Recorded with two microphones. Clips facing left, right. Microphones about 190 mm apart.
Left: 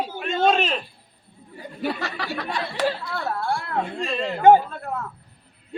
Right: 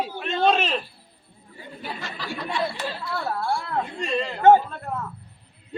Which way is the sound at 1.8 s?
70° left (ahead or behind).